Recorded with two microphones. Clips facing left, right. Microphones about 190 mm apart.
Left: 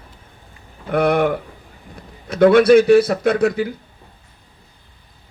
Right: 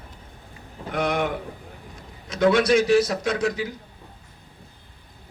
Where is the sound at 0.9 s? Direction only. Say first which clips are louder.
Left 8 dB; 60° left (ahead or behind).